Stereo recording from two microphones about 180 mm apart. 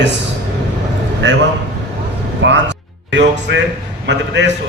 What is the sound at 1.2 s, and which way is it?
A man's voice, 80° right.